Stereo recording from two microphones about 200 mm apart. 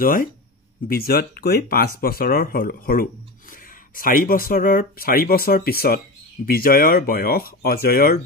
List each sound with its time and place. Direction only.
0.0 s speech: 45° left (ahead or behind)